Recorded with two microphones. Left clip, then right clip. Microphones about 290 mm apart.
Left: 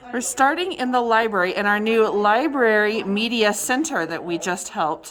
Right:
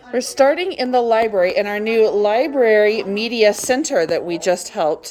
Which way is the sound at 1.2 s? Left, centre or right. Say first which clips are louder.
Right 4 dB; left.